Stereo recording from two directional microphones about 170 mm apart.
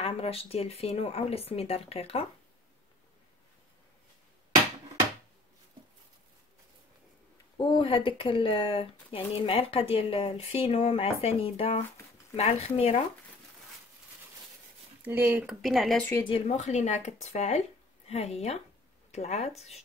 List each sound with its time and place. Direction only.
0.0 s speech: 35° left (ahead or behind)
7.5 s speech: 30° left (ahead or behind)
15.0 s speech: 10° right (ahead or behind)
15.6 s speech: centre (ahead or behind)
16.1 s speech: 20° left (ahead or behind)
16.3 s speech: 40° left (ahead or behind)